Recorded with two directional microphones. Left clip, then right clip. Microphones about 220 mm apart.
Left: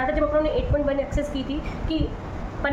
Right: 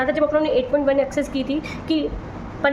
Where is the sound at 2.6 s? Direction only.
55° right (ahead or behind).